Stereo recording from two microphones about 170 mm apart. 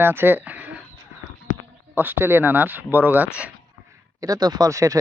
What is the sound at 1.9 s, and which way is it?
Speech, 10° right (ahead or behind).